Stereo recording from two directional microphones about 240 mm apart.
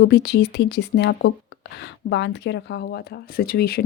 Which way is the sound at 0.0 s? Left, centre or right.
Left.